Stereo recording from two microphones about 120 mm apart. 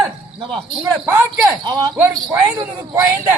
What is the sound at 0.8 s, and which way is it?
Speech, 20° right (ahead or behind).